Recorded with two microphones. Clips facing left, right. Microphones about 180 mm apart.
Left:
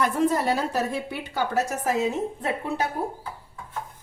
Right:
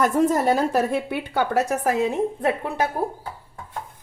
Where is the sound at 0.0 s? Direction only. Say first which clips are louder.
Right 4 dB; 45° right (ahead or behind).